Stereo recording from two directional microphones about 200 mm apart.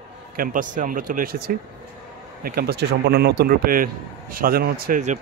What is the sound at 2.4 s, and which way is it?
A man's voice, 50° right (ahead or behind).